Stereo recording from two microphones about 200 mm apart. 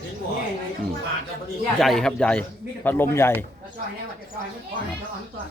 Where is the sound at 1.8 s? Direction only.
Centre (ahead or behind).